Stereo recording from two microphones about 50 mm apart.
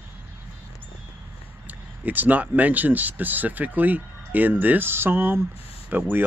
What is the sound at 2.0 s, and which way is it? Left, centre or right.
Speech, right.